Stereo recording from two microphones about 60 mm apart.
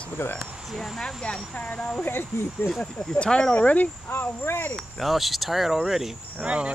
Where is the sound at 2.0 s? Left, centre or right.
Left.